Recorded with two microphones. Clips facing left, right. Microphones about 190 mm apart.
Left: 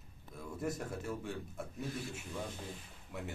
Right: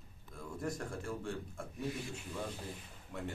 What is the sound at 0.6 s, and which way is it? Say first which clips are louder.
A man's voice: left 1 dB; 5° left (ahead or behind).